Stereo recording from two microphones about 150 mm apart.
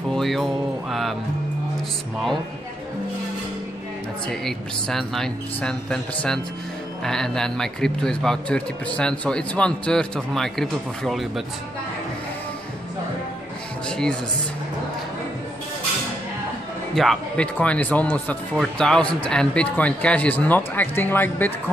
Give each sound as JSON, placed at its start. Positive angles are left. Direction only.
{"t": 0.1, "sound": "music", "side_deg": 0}
{"t": 4.3, "sound": "a man's voice", "side_deg": 5}
{"t": 13.8, "sound": "speech", "side_deg": 5}
{"t": 16.9, "sound": "speech", "side_deg": 0}